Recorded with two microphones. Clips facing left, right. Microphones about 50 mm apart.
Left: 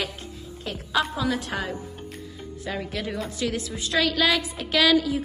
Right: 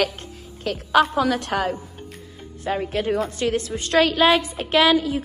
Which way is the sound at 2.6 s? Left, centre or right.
Right.